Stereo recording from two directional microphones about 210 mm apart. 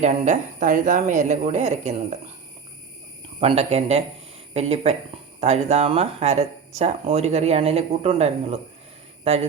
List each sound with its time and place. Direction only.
0.0 s speech: 35° right (ahead or behind)
3.4 s speech: 30° right (ahead or behind)